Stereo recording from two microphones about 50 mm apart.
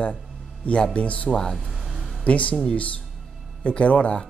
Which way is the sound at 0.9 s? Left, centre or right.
Left.